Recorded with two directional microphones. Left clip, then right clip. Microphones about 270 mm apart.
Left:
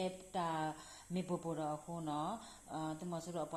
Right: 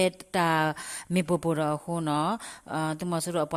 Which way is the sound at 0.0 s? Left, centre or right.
Right.